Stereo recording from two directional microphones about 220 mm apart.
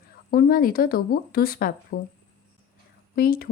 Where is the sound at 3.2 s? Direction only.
45° left (ahead or behind).